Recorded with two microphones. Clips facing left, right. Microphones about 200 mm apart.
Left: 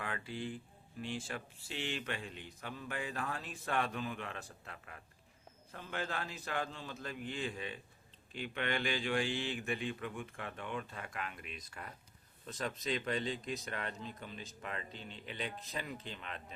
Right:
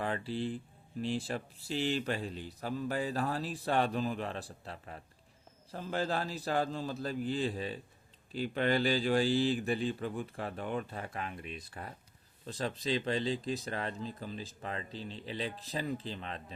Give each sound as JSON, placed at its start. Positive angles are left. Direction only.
{"t": 0.0, "sound": "speech", "side_deg": -35}